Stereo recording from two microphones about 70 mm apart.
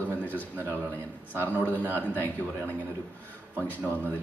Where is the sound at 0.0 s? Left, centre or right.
Left.